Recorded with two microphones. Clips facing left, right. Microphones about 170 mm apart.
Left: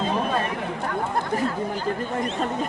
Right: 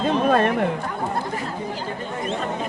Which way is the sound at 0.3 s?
55° right (ahead or behind).